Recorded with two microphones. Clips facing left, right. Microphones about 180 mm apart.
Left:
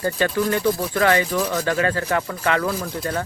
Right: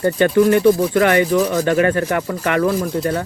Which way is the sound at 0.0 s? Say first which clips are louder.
Right 8 dB; 20° right (ahead or behind).